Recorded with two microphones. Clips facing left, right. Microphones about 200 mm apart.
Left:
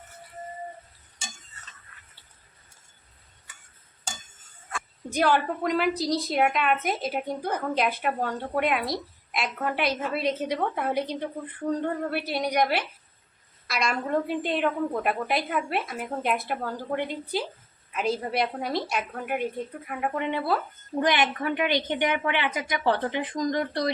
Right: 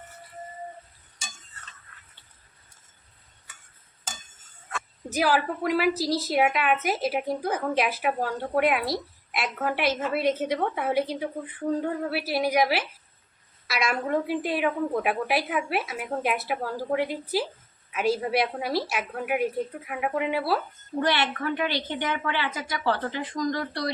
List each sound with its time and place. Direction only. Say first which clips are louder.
5.1 s a woman's voice: left 1 dB; 5° right (ahead or behind)
21.0 s a woman's voice: left 1 dB; 15° left (ahead or behind)